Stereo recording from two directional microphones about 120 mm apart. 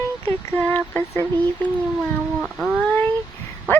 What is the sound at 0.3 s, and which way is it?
Speech, 15° left (ahead or behind).